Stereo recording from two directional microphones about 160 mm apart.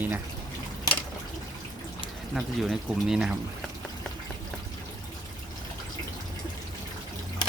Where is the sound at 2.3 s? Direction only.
Centre (ahead or behind).